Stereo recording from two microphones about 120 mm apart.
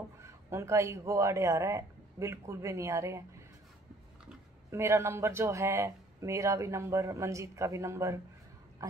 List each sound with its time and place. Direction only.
0.2 s speech: 25° right (ahead or behind)
4.6 s speech: 25° right (ahead or behind)